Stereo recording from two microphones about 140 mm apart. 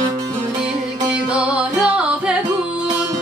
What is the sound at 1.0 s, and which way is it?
Music, 10° right (ahead or behind).